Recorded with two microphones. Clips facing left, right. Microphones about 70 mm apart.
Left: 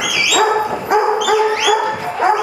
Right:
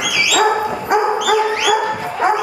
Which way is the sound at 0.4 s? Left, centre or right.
Centre.